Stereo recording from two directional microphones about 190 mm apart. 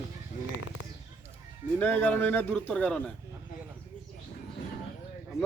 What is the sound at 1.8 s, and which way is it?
Speech, 10° left (ahead or behind).